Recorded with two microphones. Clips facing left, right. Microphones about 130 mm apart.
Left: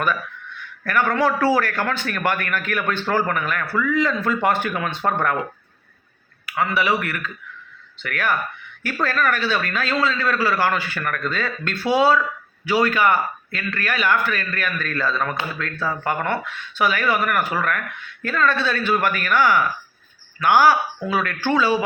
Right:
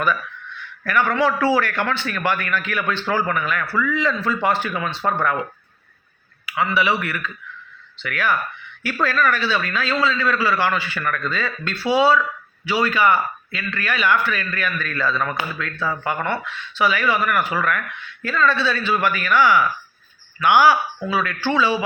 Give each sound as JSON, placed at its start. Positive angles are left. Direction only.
{"t": 0.9, "sound": "speech", "side_deg": 45}
{"t": 6.6, "sound": "speech", "side_deg": 45}